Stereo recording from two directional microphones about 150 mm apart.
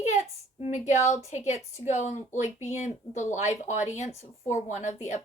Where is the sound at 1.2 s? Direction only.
50° left (ahead or behind).